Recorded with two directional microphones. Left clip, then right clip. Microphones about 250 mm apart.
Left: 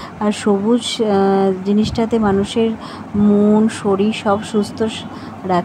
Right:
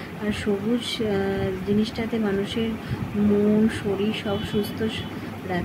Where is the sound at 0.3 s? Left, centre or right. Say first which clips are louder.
Left 9 dB; left.